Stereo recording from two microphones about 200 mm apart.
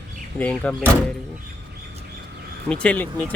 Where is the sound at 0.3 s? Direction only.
5° left (ahead or behind).